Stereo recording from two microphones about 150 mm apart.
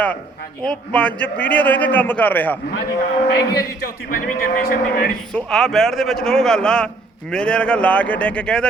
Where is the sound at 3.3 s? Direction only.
90° left.